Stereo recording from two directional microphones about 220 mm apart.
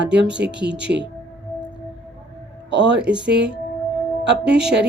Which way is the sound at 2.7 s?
50° right (ahead or behind).